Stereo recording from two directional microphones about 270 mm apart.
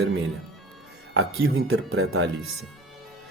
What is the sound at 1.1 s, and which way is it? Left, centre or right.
Speech, right.